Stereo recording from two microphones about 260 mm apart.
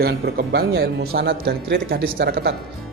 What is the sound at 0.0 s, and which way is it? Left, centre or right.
Speech, right.